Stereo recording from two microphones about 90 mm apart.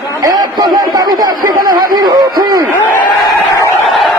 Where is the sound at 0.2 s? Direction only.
45° right (ahead or behind).